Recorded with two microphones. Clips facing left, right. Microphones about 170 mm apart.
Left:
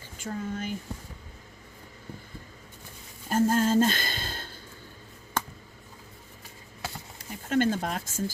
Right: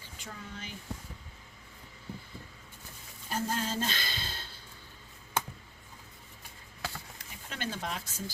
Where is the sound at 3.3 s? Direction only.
50° left (ahead or behind).